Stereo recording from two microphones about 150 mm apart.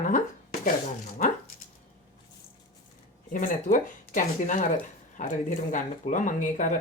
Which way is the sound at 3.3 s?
60° left (ahead or behind).